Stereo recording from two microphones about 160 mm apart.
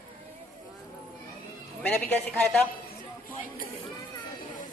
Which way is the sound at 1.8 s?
10° left (ahead or behind).